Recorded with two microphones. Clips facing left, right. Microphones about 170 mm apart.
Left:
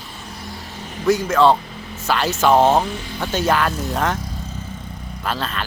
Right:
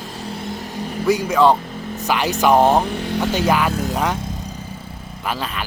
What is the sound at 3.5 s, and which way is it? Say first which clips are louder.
Speech: right 1 dB; 10° right (ahead or behind).